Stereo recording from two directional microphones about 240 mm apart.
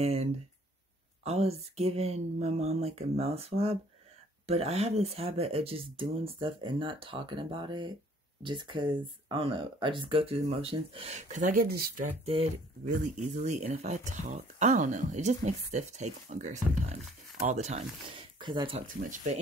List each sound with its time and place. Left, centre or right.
0.0 s speech: right